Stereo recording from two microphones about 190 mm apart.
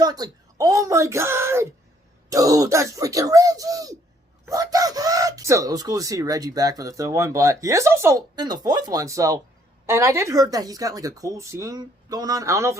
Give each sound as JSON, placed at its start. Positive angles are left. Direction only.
{"t": 0.0, "sound": "speech", "side_deg": -20}